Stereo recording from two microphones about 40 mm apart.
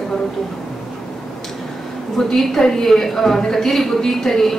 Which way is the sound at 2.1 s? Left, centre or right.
Centre.